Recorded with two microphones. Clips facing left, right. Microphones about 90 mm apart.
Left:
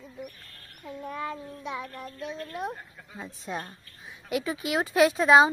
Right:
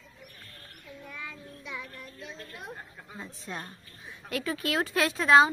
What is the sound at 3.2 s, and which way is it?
Speech, 15° left (ahead or behind).